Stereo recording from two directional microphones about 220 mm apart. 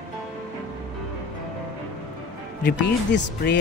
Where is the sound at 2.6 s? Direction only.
55° left (ahead or behind).